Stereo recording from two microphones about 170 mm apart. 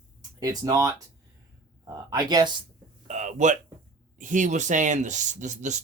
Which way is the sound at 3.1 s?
45° right (ahead or behind).